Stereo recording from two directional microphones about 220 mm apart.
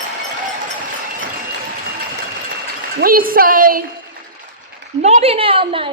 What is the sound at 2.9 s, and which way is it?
Speech, 40° right (ahead or behind).